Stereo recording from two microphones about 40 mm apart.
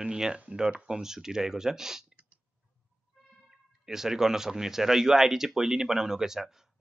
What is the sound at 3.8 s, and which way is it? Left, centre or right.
Speech, centre.